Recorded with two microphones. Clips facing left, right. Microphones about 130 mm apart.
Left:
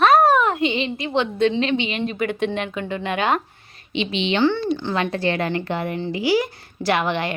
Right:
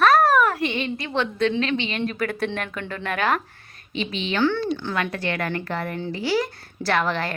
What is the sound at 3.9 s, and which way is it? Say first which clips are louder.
Speech: left 5 dB; 40° right (ahead or behind).